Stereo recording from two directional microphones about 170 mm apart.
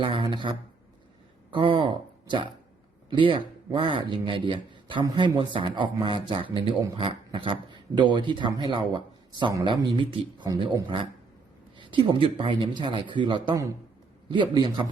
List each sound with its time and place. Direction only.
0.0 s speech: 30° right (ahead or behind)